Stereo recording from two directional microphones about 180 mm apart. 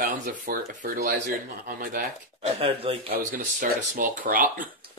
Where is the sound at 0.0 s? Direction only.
50° right (ahead or behind).